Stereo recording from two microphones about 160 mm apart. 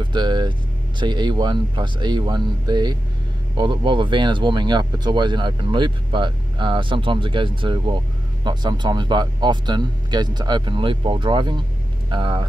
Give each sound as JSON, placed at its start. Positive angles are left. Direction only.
{"t": 0.0, "sound": "speech", "side_deg": -30}